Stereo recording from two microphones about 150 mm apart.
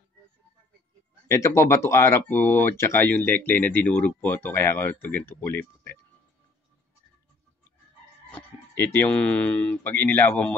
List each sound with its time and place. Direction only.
1.2 s speech: 20° left (ahead or behind)
8.3 s speech: 15° left (ahead or behind)